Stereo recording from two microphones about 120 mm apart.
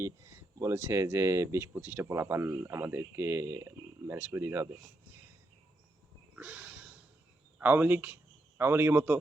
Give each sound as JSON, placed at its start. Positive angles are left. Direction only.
{"t": 0.0, "sound": "speech", "side_deg": -25}
{"t": 6.3, "sound": "snort", "side_deg": -10}
{"t": 7.6, "sound": "a man's voice", "side_deg": -15}